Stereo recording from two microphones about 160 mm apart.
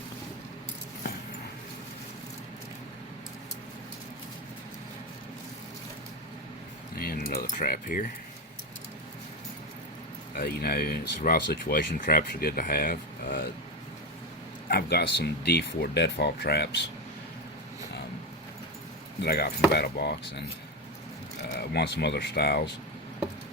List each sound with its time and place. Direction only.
7.0 s keys jangling: 70° left (ahead or behind)
10.3 s speech: 70° left (ahead or behind)
14.7 s speech: 80° left
19.2 s speech: 85° left
21.7 s speech: 90° left